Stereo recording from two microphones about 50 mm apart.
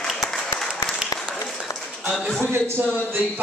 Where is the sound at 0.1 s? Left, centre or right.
Centre.